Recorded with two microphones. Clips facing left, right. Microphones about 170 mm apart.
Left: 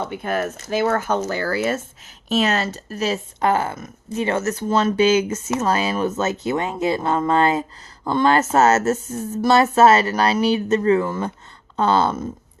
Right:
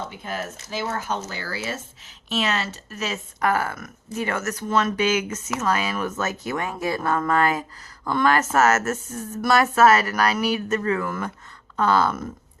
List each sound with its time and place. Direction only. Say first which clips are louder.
0.1 s speech: left 8 dB; 60° left (ahead or behind)
2.3 s speech: left 5 dB; 40° left (ahead or behind); by 12.3 s 25° left (ahead or behind)